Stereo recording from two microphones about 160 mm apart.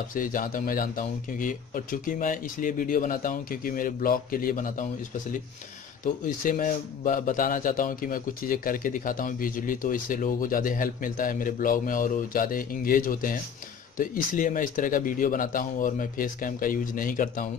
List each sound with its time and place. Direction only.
0.1 s speech: 60° left (ahead or behind)
6.2 s speech: 55° left (ahead or behind)